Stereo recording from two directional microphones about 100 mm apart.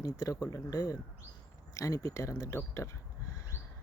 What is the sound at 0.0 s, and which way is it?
Speech, 35° left (ahead or behind).